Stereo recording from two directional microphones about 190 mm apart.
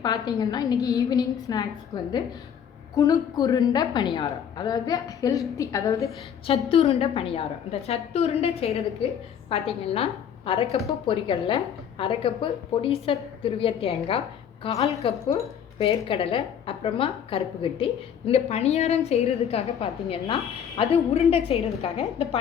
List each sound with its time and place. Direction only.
0.0 s a woman's voice: 20° left (ahead or behind)
6.7 s a woman's voice: 30° left (ahead or behind)
15.0 s a woman's voice: 30° left (ahead or behind)